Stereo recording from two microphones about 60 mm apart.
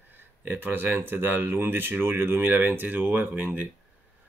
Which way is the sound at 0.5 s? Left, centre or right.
Right.